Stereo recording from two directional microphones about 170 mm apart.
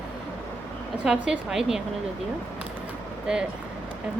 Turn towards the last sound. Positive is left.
turn(degrees=-5)  # may be behind; listen again after turning